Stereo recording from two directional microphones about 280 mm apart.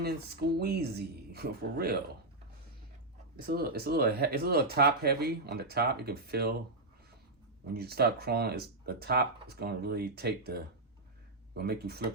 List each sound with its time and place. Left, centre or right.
0.0 s speech: right
3.4 s speech: right
7.7 s speech: right